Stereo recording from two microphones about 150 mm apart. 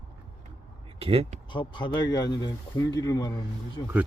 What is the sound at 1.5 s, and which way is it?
Speech, 30° left (ahead or behind).